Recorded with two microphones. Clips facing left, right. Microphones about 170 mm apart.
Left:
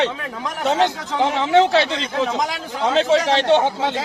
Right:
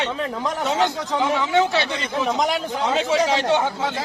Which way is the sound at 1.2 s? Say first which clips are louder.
Left 4 dB; 30° left (ahead or behind).